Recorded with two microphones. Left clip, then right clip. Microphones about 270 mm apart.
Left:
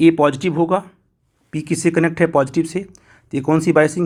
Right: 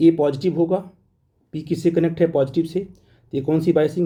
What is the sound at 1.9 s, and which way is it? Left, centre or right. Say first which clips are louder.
A man's voice: left 2 dB; centre.